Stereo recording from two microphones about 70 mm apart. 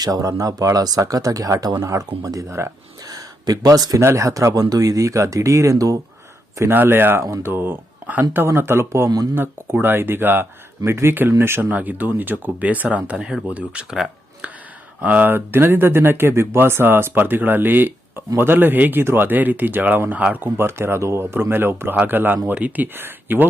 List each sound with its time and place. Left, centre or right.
0.0 s speech: right
1.6 s speech: right
3.1 s a sound: right
4.0 s speech: right
6.7 s speech: right
15.0 s speech: right